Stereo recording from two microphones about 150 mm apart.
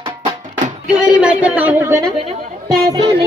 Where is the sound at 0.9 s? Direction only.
5° right (ahead or behind).